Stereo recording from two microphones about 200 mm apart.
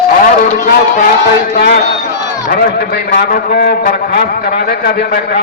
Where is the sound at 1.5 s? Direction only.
50° left (ahead or behind).